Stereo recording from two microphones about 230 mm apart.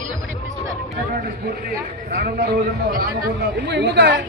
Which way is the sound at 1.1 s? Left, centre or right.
Right.